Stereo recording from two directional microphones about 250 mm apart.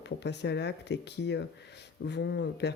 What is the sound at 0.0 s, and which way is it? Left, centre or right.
Speech, left.